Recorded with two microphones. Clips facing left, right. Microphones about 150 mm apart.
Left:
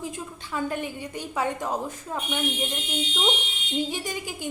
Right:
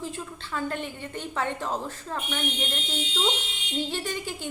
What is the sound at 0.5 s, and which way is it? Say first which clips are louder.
A woman's voice: left 2 dB; 10° left (ahead or behind).